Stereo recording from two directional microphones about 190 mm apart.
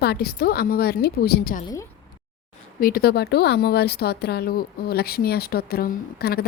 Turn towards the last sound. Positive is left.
turn(degrees=55)  # may be behind; listen again after turning